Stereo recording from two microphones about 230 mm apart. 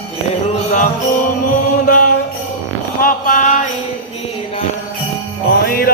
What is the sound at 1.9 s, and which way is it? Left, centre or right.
Mantra, left.